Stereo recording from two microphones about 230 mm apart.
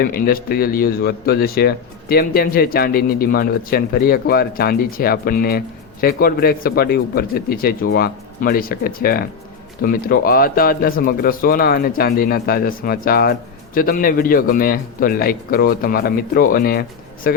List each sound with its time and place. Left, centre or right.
0.0 s speech: left